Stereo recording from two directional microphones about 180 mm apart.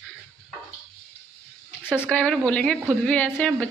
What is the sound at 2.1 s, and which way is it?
Speech, 5° left (ahead or behind).